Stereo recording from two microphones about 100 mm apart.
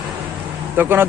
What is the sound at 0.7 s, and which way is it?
Speech, 20° right (ahead or behind).